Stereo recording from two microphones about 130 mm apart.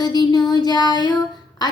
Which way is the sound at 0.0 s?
35° left (ahead or behind).